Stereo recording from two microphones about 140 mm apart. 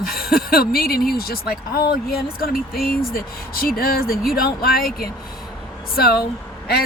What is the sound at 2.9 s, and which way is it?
Speech, 90° left.